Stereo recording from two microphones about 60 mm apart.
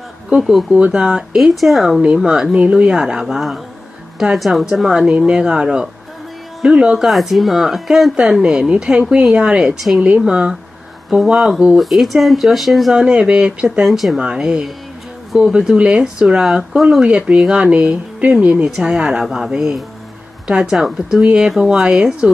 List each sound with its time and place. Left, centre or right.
0.3 s speech: centre
5.0 s speech: centre
8.4 s speech: centre
10.0 s speech: centre
11.1 s speech: centre
13.8 s speech: centre
14.2 s speech: centre
17.0 s speech: centre